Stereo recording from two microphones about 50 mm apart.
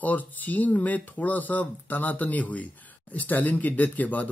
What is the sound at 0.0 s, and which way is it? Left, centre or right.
Speech, left.